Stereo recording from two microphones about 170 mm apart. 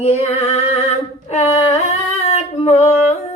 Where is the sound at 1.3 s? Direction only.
40° left (ahead or behind).